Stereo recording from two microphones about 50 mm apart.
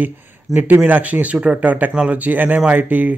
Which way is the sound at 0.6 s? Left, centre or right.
Right.